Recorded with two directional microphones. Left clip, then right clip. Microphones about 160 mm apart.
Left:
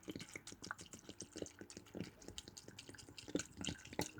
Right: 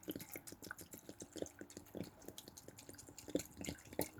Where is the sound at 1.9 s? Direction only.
15° left (ahead or behind).